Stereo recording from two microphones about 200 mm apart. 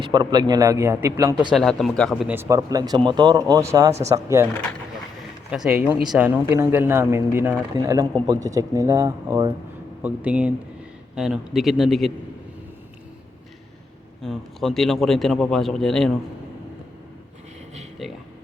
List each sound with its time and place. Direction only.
0.1 s speech: 20° right (ahead or behind)
1.5 s speech: centre (ahead or behind); by 4.4 s 15° right (ahead or behind)
5.5 s a man's voice: 5° right (ahead or behind)
10.0 s a man's voice: 5° right (ahead or behind)
14.2 s a man's voice: centre (ahead or behind)
18.0 s a man's voice: centre (ahead or behind)